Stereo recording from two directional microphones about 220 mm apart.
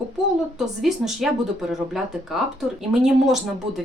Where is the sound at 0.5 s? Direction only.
Centre (ahead or behind).